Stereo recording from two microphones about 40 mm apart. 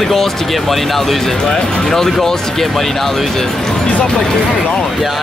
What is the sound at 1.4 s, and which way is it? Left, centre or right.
Speech, centre.